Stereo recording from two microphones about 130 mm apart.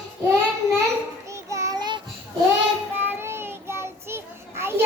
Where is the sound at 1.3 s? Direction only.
25° right (ahead or behind).